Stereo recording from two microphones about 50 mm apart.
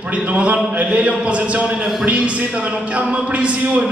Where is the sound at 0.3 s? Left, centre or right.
Right.